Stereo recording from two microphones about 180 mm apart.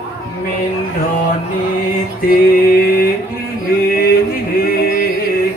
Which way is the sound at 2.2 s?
55° left (ahead or behind).